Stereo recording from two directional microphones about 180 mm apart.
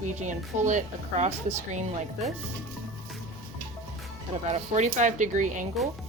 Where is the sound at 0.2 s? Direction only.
45° right (ahead or behind).